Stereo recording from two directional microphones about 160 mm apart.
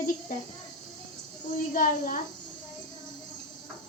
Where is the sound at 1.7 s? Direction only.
60° left (ahead or behind).